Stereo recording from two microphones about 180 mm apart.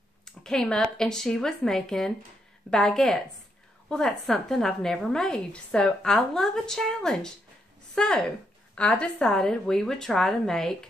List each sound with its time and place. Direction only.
0.2 s a woman's voice: 5° left (ahead or behind)